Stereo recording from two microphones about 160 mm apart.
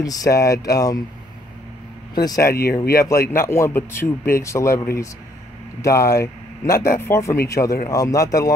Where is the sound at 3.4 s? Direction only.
15° left (ahead or behind).